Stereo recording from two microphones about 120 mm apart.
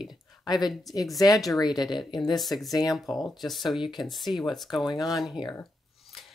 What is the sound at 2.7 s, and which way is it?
Speech, 30° left (ahead or behind).